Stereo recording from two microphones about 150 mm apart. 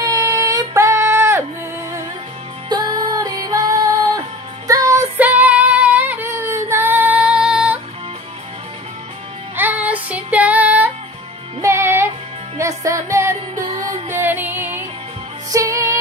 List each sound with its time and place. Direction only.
0.0 s a sound: 25° right (ahead or behind)
2.7 s music: 30° right (ahead or behind)
5.1 s female singing: 10° right (ahead or behind)
9.6 s music: 10° right (ahead or behind)